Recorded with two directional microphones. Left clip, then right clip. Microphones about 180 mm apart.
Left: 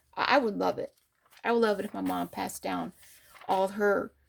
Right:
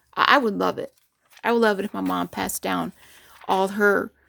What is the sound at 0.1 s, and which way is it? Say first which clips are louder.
Speech: right 8 dB; 45° right (ahead or behind).